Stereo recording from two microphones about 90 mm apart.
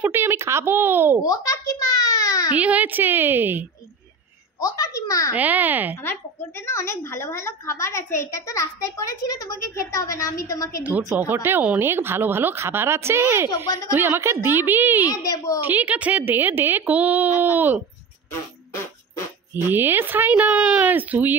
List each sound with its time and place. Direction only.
0.0 s speech: 25° right (ahead or behind)
1.2 s a sound: 40° left (ahead or behind)
2.5 s speech: 15° right (ahead or behind)
4.6 s a woman's voice: 40° left (ahead or behind)
5.3 s speech: 20° right (ahead or behind)
6.6 s a woman's voice: 30° left (ahead or behind)
10.8 s speech: 20° right (ahead or behind)
15.0 s a woman's voice: 40° left (ahead or behind)
15.6 s speech: 20° right (ahead or behind)
19.5 s speech: 20° right (ahead or behind)